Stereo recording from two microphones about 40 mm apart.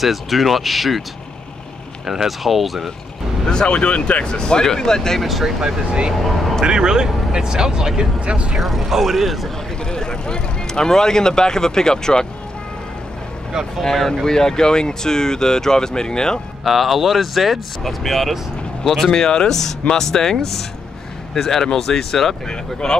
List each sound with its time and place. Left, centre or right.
0.0 s speech: centre
2.0 s speech: centre
3.4 s speech: left
5.2 s speech: centre
6.6 s speech: centre
8.5 s speech: centre
9.8 s speech: centre
13.7 s speech: centre
16.6 s speech: centre
19.1 s speech: centre
21.4 s speech: centre